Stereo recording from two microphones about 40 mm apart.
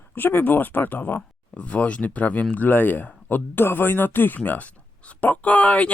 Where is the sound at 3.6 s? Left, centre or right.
Left.